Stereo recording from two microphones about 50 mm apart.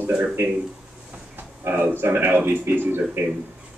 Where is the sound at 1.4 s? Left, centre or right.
Right.